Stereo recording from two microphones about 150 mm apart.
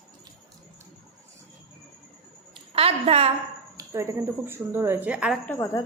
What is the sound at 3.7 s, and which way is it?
A woman's voice, 20° right (ahead or behind).